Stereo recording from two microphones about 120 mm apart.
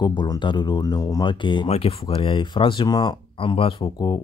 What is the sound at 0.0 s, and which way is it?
Speech, 40° left (ahead or behind).